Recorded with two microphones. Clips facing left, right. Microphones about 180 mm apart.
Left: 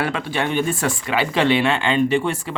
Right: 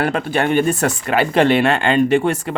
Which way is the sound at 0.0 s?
50° right (ahead or behind).